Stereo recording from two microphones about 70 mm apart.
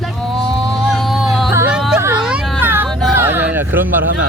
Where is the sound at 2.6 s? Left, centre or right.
Right.